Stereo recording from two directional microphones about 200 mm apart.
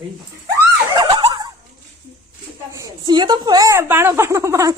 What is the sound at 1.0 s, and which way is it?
Neigh, 25° right (ahead or behind).